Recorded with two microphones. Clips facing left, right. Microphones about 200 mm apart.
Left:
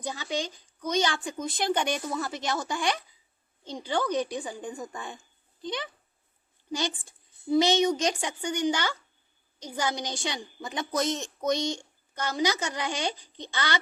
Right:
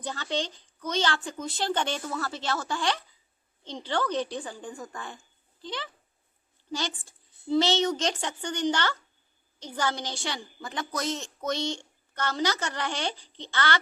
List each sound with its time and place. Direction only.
0.0 s a woman's voice: 10° left (ahead or behind)